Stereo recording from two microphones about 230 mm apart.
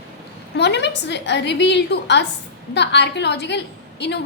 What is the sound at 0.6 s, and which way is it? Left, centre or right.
A woman's voice, left.